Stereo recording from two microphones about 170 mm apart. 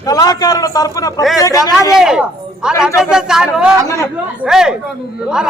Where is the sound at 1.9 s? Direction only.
5° right (ahead or behind).